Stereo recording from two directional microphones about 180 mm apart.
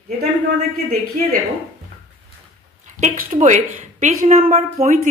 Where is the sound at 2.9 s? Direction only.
50° right (ahead or behind).